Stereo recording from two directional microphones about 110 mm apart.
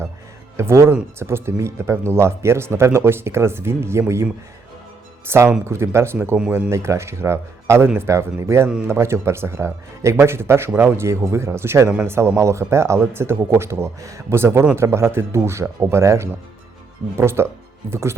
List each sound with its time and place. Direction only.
0.5 s speech: 25° right (ahead or behind)
5.3 s speech: 20° right (ahead or behind)